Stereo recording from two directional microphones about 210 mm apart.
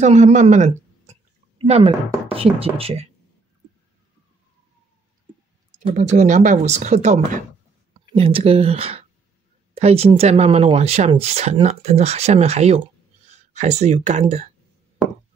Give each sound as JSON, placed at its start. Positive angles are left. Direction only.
{"t": 0.0, "sound": "speech", "side_deg": -35}
{"t": 5.9, "sound": "speech", "side_deg": -35}